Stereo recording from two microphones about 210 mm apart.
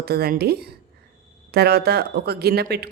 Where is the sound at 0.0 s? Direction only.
45° right (ahead or behind).